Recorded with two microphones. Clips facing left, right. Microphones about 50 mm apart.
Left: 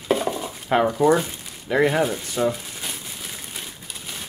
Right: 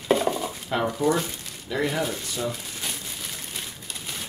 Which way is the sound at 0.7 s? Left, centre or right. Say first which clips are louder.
Left 6 dB; left.